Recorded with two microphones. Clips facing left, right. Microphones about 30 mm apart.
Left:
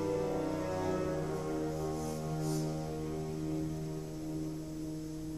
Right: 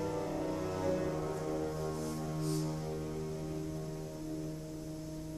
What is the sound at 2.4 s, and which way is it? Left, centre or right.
Music, right.